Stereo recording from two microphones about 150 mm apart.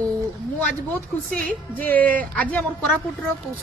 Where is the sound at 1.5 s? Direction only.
10° left (ahead or behind).